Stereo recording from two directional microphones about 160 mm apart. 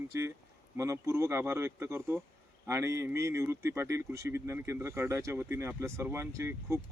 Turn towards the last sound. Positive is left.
turn(degrees=-15)  # may be behind; listen again after turning